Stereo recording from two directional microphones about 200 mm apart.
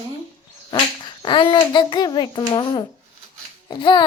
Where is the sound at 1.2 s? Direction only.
25° left (ahead or behind).